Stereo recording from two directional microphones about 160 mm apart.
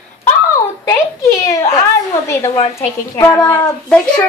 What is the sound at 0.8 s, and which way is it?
A child's voice, 20° left (ahead or behind).